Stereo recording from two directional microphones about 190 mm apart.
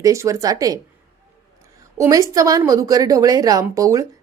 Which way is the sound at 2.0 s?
15° right (ahead or behind).